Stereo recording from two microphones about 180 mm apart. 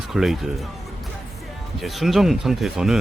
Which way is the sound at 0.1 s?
Centre (ahead or behind).